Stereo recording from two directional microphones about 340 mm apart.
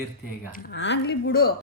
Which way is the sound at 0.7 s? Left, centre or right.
Left.